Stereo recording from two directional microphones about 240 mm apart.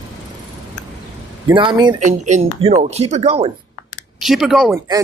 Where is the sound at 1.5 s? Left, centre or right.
Centre.